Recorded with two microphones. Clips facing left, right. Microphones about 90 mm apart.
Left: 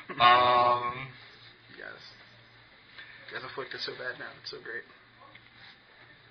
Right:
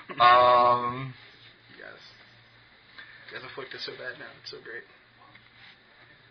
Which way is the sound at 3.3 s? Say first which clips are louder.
Left 1 dB; 20° left (ahead or behind).